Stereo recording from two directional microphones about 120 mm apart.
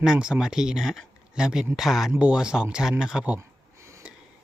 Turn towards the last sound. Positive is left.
turn(degrees=-25)  # may be behind; listen again after turning